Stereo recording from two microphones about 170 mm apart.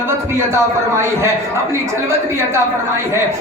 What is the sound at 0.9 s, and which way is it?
A woman's voice, 15° right (ahead or behind).